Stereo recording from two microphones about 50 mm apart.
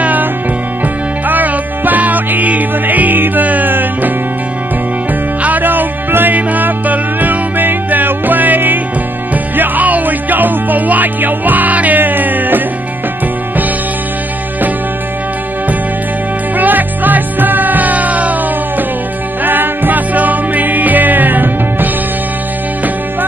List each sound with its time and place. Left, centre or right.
0.0 s music: right
5.4 s music: right
16.5 s music: right